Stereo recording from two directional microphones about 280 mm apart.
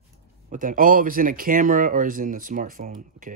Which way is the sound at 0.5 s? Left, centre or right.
Right.